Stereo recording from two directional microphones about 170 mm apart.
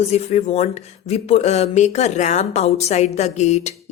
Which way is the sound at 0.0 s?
40° left (ahead or behind).